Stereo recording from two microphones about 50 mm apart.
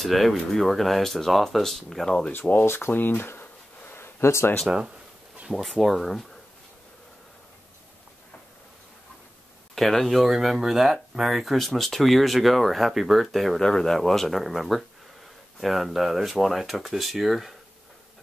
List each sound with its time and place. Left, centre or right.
0.0 s speech: centre
2.6 s speech: left
2.9 s a sound: left
4.6 s speech: centre
5.5 s speech: centre
9.8 s speech: centre
13.6 s speech: centre